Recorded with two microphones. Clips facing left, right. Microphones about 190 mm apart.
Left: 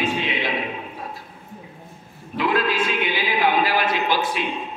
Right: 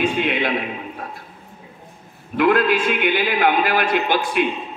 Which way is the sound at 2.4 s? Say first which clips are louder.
Right 5 dB; 55° right (ahead or behind).